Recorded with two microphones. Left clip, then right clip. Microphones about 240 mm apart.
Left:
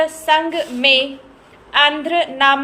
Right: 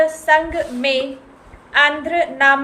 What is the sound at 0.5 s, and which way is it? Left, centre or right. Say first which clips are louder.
Speech: left 4 dB; centre.